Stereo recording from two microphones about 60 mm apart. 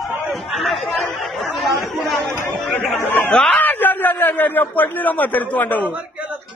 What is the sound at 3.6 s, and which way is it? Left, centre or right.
A man's voice, left.